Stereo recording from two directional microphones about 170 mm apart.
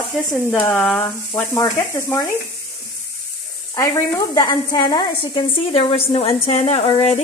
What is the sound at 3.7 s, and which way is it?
A woman's voice, 20° left (ahead or behind).